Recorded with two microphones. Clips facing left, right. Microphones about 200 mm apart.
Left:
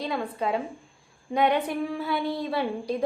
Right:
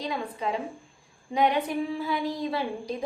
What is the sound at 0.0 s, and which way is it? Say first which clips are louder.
A woman's voice: left 2 dB; 60° left (ahead or behind).